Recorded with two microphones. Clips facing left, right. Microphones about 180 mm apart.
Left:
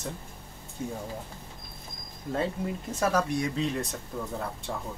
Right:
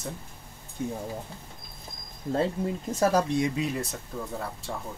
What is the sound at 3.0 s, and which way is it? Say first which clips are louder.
Speech: right 3 dB; 35° right (ahead or behind).